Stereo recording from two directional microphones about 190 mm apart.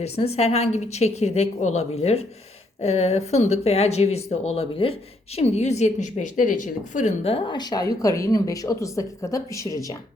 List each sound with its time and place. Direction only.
0.0 s speech: 35° left (ahead or behind); by 10.0 s 15° left (ahead or behind)